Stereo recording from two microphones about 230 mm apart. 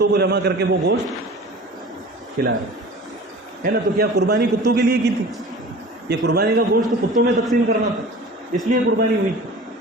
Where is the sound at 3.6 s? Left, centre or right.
Right.